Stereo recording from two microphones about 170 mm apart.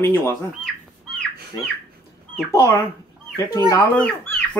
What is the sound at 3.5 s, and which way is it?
Speech, 20° left (ahead or behind).